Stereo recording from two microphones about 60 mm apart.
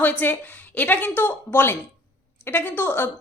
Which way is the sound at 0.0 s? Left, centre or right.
Left.